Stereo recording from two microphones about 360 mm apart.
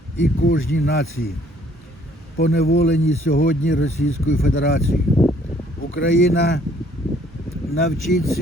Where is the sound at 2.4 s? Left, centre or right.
Left.